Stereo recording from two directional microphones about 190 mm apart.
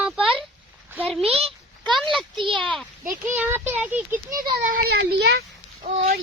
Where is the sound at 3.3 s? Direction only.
10° right (ahead or behind).